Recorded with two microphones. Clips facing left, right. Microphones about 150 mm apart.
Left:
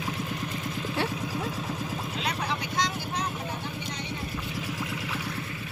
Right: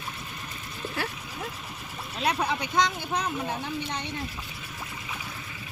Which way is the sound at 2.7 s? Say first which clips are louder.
Right 5 dB; 60° right (ahead or behind).